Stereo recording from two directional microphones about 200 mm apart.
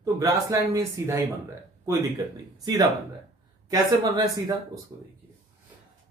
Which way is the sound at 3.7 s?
20° right (ahead or behind).